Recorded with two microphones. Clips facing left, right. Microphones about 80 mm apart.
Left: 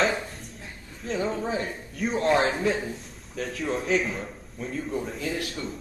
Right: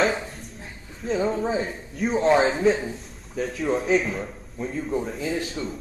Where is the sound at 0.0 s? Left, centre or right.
Centre.